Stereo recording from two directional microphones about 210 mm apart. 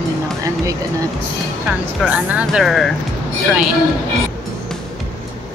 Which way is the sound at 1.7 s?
10° right (ahead or behind).